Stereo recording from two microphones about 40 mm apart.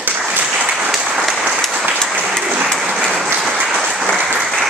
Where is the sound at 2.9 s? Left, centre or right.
Centre.